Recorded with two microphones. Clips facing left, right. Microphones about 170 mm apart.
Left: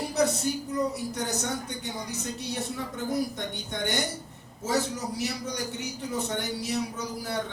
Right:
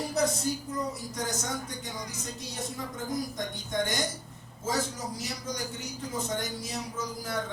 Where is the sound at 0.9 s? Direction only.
65° left (ahead or behind).